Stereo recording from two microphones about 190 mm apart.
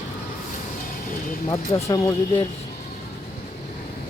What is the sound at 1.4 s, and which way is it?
Speech, 25° left (ahead or behind).